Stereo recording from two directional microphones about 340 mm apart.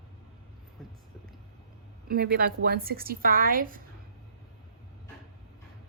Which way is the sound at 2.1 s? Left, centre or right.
Right.